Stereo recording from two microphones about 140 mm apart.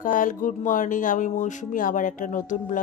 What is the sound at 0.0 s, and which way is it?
Speech, 70° left (ahead or behind).